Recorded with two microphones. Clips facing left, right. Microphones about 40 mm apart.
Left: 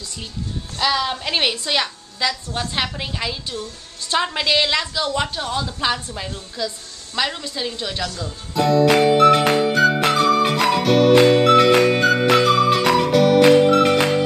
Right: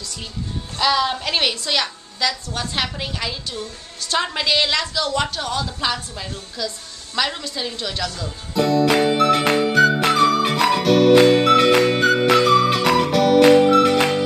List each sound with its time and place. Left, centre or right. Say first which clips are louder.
0.7 s a woman's voice: right 2 dB; centre
1.5 s a woman's voice: left 1 dB; centre
7.2 s a woman's voice: even; centre
8.5 s music: left 2 dB; centre